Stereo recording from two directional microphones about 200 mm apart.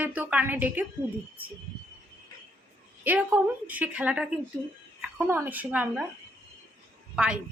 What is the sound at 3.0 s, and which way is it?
A woman's voice, 10° right (ahead or behind).